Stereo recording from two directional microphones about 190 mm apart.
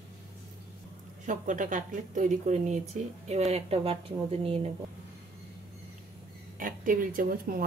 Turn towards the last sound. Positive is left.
turn(degrees=-50)  # may be behind; listen again after turning